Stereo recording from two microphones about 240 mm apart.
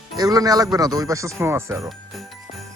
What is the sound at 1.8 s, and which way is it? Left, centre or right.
Jingle bell, centre.